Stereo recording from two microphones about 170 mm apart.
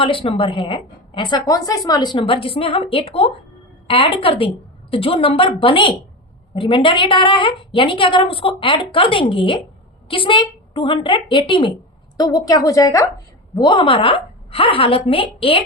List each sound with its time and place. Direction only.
0.0 s a woman's voice: 30° left (ahead or behind)